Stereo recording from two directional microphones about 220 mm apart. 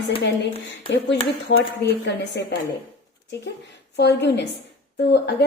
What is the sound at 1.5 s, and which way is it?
Speech, 50° left (ahead or behind).